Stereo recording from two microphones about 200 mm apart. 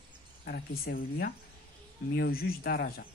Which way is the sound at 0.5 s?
45° left (ahead or behind).